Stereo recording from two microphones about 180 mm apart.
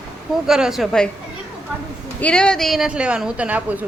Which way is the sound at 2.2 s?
5° left (ahead or behind).